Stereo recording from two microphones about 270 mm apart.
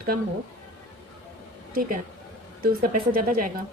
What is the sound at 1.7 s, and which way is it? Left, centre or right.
Speech, right.